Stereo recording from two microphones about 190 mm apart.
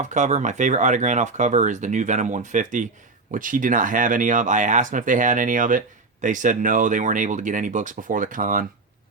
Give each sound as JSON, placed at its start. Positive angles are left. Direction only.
{"t": 0.0, "sound": "speech", "side_deg": -40}